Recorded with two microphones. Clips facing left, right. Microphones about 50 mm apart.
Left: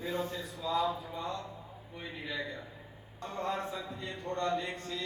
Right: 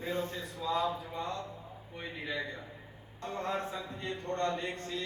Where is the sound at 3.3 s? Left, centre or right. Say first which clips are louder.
Even; centre.